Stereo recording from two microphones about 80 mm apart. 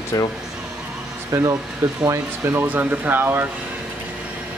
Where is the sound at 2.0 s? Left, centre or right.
Right.